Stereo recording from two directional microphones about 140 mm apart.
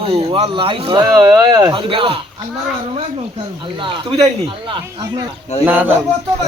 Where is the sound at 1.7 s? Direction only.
40° right (ahead or behind).